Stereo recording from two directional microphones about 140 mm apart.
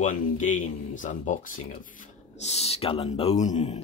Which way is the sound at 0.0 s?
60° left (ahead or behind).